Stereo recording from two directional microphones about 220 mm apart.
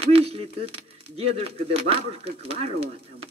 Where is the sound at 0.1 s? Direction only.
25° right (ahead or behind).